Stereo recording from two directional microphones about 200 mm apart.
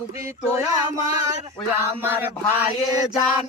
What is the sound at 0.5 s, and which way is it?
Speech, 15° right (ahead or behind).